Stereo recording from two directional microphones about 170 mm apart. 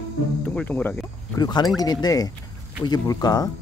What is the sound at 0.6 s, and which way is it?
Speech, 10° left (ahead or behind).